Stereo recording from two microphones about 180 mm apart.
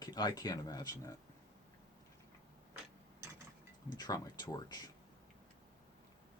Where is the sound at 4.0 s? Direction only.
20° left (ahead or behind).